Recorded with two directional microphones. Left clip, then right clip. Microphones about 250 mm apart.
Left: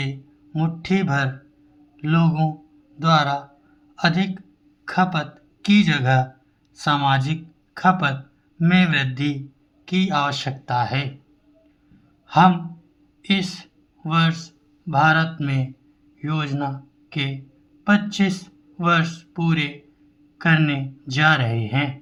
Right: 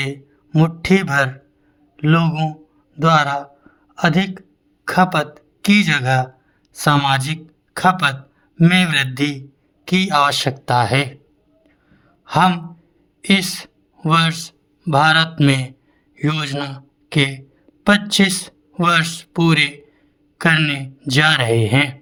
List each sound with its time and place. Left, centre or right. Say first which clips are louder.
0.0 s speech: right 7 dB; right
12.2 s a man's voice: right 1 dB; right